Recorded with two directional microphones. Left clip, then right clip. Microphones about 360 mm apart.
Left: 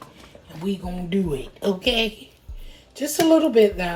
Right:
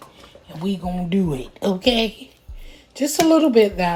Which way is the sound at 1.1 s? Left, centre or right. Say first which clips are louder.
Left 1 dB; right.